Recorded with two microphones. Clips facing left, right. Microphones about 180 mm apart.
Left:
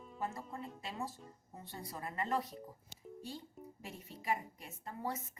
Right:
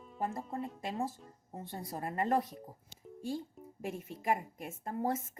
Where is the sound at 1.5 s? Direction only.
50° right (ahead or behind).